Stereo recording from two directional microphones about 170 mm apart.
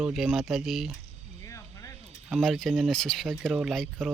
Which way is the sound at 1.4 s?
20° left (ahead or behind).